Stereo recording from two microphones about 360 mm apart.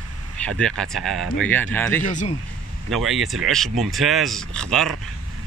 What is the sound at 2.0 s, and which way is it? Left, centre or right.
Speech, left.